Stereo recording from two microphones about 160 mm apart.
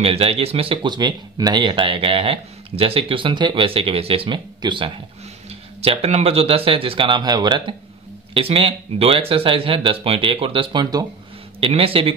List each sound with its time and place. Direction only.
0.0 s speech: 40° right (ahead or behind)
11.6 s speech: 35° right (ahead or behind)